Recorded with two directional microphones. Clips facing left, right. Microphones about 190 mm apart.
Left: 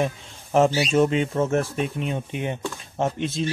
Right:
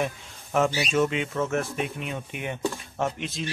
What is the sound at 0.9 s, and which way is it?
Speech, 35° left (ahead or behind).